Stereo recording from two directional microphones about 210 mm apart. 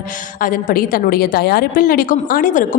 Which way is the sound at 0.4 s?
40° left (ahead or behind).